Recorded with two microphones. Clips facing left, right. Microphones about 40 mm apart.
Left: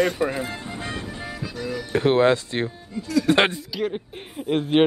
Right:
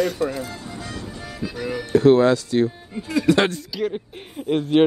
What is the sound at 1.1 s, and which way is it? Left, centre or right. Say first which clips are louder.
Music: left 2 dB; centre.